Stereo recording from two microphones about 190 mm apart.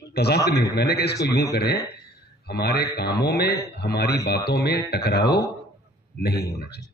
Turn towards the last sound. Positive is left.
turn(degrees=60)  # may be behind; listen again after turning